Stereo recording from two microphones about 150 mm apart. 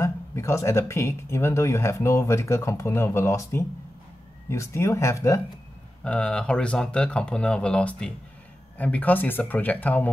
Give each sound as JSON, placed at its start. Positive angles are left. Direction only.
{"t": 0.0, "sound": "speech", "side_deg": 20}
{"t": 6.0, "sound": "speech", "side_deg": 5}